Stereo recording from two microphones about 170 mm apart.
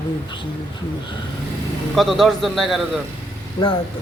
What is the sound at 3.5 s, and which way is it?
Speech, 30° left (ahead or behind).